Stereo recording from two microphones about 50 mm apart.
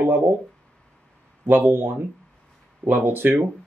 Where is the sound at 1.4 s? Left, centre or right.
Right.